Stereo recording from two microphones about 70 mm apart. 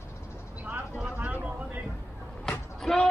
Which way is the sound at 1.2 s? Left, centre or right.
Right.